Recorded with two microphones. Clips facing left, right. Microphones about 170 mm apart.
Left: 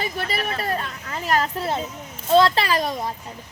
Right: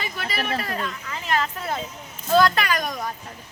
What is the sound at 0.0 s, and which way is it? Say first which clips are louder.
A woman's voice: left 3 dB; 35° left (ahead or behind).